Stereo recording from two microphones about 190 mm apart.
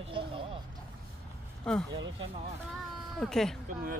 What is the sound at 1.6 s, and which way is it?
Speech, 5° left (ahead or behind).